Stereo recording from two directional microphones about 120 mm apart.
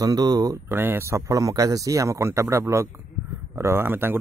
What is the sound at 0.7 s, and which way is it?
Speech, 20° right (ahead or behind).